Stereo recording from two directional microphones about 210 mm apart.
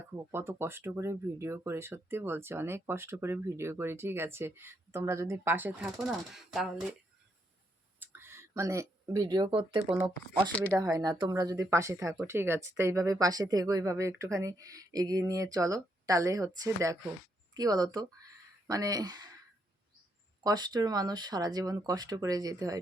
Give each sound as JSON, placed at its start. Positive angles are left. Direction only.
{"t": 0.0, "sound": "speech", "side_deg": -10}
{"t": 7.9, "sound": "speech", "side_deg": -10}
{"t": 20.4, "sound": "speech", "side_deg": -20}